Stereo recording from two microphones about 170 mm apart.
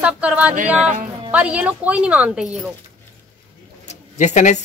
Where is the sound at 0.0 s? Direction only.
10° right (ahead or behind).